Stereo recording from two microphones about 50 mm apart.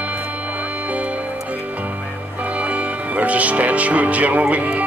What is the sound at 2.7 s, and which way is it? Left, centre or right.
Music, right.